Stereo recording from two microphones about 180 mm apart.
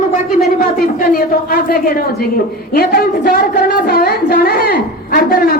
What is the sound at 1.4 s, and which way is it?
A man's voice, 55° left (ahead or behind).